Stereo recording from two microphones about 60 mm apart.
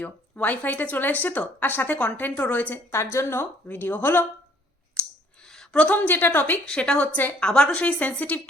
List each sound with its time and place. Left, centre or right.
0.3 s a woman's voice: left
2.9 s a woman's voice: left
3.7 s speech: left
5.0 s clicking: left
5.5 s a woman's voice: centre; by 6.6 s left
6.7 s a woman's voice: centre